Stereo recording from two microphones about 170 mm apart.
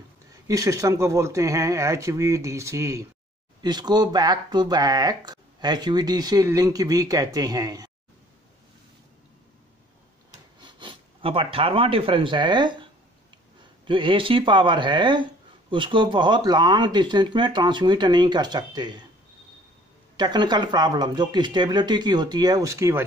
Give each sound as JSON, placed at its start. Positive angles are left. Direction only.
{"t": 0.5, "sound": "speech", "side_deg": -20}
{"t": 10.6, "sound": "speech", "side_deg": -30}
{"t": 13.8, "sound": "speech", "side_deg": -30}
{"t": 20.2, "sound": "speech", "side_deg": -25}